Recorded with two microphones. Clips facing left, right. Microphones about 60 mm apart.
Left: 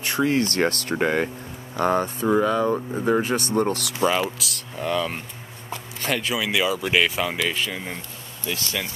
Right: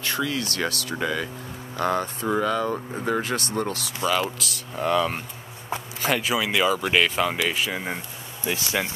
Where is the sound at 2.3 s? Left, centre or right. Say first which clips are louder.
Left 3 dB; centre.